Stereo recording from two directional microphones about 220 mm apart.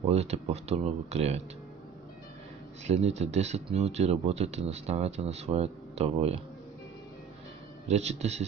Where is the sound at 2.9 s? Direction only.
30° right (ahead or behind).